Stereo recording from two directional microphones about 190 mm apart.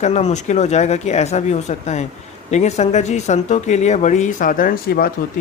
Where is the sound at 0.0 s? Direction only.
35° left (ahead or behind).